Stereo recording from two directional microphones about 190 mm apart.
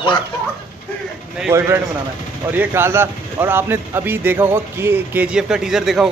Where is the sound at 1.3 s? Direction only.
10° right (ahead or behind).